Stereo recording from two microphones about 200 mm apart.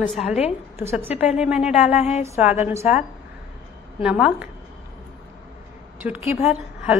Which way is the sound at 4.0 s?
5° right (ahead or behind).